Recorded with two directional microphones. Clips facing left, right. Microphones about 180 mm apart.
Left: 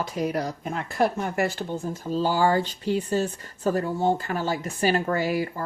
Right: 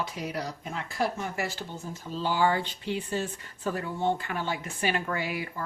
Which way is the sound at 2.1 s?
40° left (ahead or behind).